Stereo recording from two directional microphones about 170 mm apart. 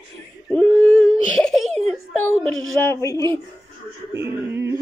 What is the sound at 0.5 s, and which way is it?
Baby cry, 5° left (ahead or behind).